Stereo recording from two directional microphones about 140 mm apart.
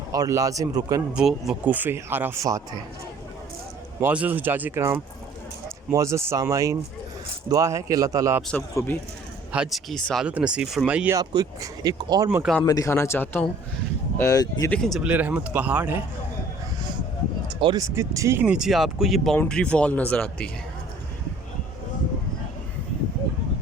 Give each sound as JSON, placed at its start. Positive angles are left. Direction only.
{"t": 0.1, "sound": "speech", "side_deg": -25}
{"t": 1.1, "sound": "speech", "side_deg": -5}
{"t": 4.0, "sound": "speech", "side_deg": -10}
{"t": 9.5, "sound": "speech", "side_deg": -5}
{"t": 11.1, "sound": "speech", "side_deg": -25}
{"t": 12.6, "sound": "a man's voice", "side_deg": 25}
{"t": 14.7, "sound": "speech", "side_deg": 5}
{"t": 15.0, "sound": "speech", "side_deg": -10}
{"t": 17.6, "sound": "speech", "side_deg": -30}
{"t": 18.5, "sound": "speech", "side_deg": -5}